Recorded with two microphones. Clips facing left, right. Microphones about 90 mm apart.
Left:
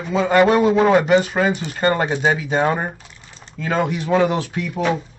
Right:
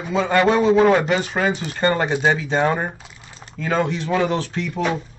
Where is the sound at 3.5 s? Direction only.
5° left (ahead or behind).